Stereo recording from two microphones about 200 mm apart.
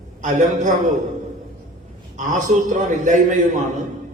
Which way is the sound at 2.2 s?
40° right (ahead or behind).